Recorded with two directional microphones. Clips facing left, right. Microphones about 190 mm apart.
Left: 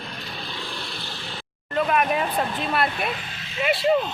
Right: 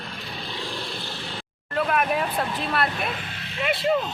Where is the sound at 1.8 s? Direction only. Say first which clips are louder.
Left 1 dB; centre (ahead or behind).